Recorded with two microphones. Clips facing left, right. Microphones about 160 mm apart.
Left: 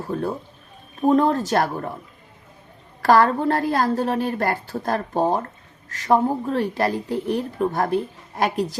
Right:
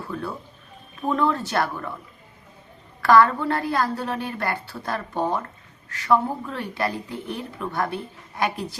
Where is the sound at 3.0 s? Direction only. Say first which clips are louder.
Left 1 dB; 40° left (ahead or behind).